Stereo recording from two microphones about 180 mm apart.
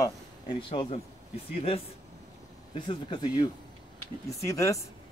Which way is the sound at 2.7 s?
25° left (ahead or behind).